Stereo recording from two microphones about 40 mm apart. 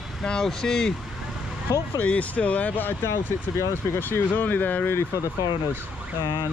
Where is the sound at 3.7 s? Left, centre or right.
Left.